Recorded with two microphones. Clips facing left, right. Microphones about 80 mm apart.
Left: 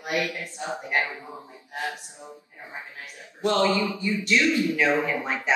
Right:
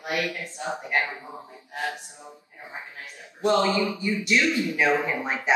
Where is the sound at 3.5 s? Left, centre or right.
Right.